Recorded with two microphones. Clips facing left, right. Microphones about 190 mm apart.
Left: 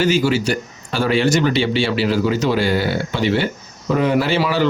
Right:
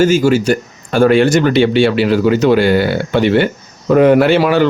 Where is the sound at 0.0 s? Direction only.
45° right (ahead or behind).